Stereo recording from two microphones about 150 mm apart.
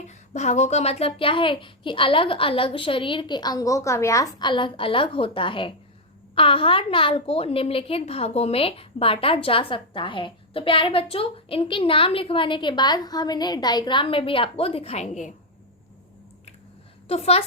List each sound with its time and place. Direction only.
0.1 s a woman's voice: 50° left (ahead or behind)
17.1 s a woman's voice: 45° left (ahead or behind)